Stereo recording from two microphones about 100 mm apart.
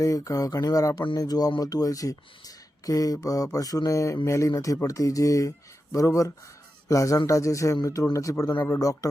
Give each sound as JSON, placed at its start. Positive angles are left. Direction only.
{"t": 0.0, "sound": "speech", "side_deg": 35}